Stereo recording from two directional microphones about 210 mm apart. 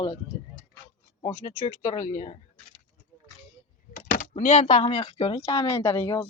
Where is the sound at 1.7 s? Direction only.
35° left (ahead or behind).